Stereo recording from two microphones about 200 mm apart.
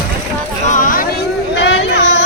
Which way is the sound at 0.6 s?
40° left (ahead or behind).